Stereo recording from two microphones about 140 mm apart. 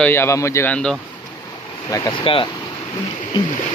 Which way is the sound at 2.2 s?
40° left (ahead or behind).